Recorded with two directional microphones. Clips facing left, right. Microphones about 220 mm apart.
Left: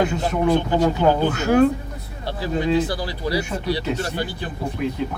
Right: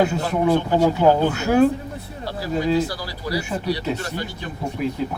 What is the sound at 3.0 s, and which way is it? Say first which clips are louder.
A man's voice: left 3 dB; 25° left (ahead or behind).